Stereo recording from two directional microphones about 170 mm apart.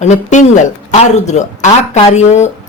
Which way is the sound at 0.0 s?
45° left (ahead or behind).